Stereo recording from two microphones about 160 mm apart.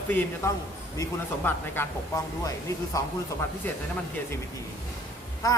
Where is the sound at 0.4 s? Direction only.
15° left (ahead or behind).